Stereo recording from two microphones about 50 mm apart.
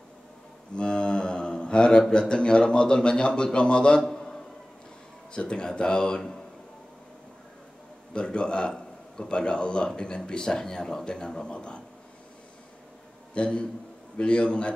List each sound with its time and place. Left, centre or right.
0.7 s a man's voice: centre
4.0 s a sound: centre
5.3 s a man's voice: centre
8.1 s a man's voice: centre
13.3 s a man's voice: left